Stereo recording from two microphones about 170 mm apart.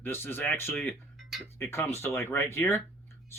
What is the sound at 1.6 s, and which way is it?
Speech, 15° left (ahead or behind).